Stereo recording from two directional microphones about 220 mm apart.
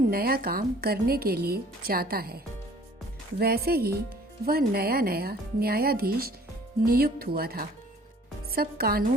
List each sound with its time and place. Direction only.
0.1 s speech: 45° right (ahead or behind)